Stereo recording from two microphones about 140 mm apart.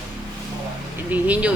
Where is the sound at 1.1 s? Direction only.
10° right (ahead or behind).